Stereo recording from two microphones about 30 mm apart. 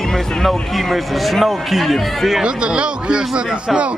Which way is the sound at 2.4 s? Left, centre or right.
Right.